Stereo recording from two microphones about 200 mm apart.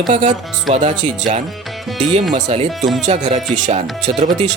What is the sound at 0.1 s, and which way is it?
Speech, 35° right (ahead or behind).